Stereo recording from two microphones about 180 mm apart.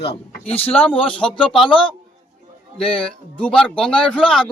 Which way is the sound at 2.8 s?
5° left (ahead or behind).